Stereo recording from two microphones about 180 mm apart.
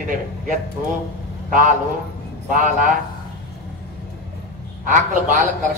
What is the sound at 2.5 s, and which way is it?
Speech, 45° right (ahead or behind).